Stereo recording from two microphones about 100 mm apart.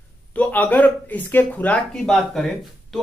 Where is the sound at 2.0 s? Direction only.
5° left (ahead or behind).